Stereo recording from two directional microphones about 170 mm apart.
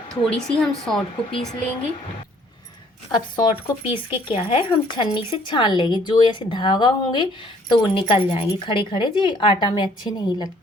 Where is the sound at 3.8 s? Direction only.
30° left (ahead or behind).